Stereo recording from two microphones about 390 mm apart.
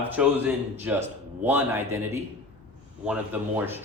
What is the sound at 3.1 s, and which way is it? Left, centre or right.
Speech, centre.